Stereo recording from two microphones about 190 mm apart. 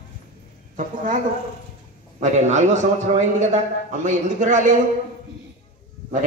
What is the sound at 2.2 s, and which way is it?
A man's voice, 40° right (ahead or behind).